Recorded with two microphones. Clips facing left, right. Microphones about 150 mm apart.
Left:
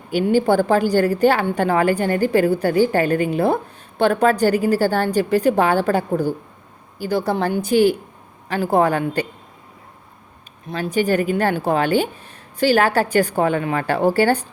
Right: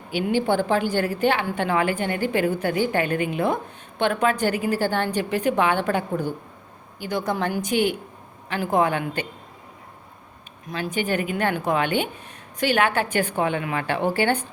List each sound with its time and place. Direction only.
0.1 s a woman's voice: 45° left (ahead or behind)
10.7 s a woman's voice: 35° left (ahead or behind)